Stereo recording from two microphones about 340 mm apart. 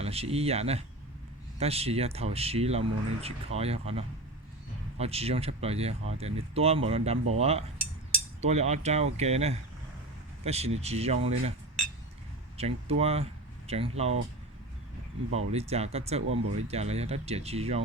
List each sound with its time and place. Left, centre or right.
0.0 s speech: centre
12.5 s speech: centre
15.5 s speech: centre
16.2 s speech: right
16.6 s speech: centre